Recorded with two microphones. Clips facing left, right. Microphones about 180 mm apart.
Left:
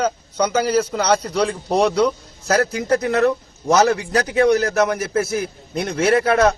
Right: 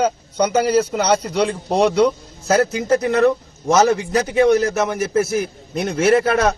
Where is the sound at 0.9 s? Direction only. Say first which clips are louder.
Right 1 dB; 10° right (ahead or behind).